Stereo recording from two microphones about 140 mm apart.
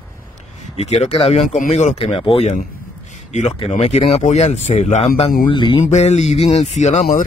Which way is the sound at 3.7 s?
50° left (ahead or behind).